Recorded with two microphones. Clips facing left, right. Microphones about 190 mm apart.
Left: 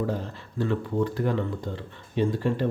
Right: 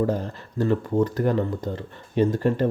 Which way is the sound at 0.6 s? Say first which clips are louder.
Right 4 dB; 45° right (ahead or behind).